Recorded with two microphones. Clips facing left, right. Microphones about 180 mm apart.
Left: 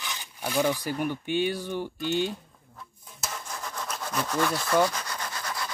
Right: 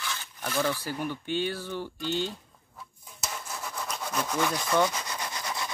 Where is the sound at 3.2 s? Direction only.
5° right (ahead or behind).